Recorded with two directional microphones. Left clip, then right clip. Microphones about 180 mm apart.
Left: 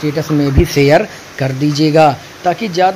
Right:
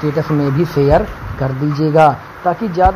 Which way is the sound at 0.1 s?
25° left (ahead or behind).